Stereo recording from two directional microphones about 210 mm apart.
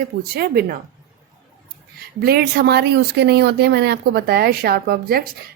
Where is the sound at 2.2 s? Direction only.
50° right (ahead or behind).